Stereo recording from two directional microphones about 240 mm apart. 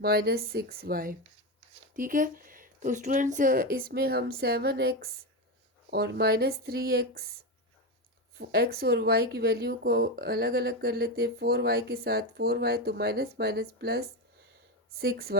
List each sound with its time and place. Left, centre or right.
0.0 s speech: right
8.4 s speech: right